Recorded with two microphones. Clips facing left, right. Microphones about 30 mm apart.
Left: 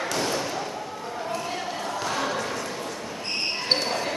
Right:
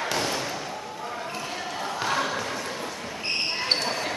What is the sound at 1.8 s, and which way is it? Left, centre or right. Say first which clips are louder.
Basketball bounce: right 4 dB; centre.